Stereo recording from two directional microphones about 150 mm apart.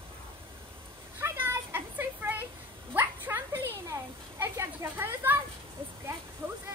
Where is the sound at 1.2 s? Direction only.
15° right (ahead or behind).